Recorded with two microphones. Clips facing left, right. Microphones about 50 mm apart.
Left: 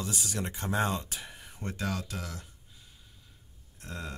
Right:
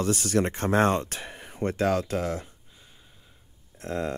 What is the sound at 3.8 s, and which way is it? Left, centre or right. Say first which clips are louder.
Speech: right 11 dB; right.